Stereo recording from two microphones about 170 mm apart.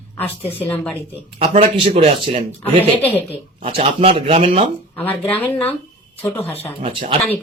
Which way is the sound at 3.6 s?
35° right (ahead or behind).